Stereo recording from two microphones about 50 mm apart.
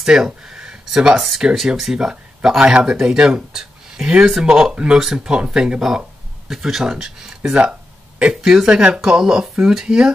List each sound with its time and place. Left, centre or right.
0.0 s speech: centre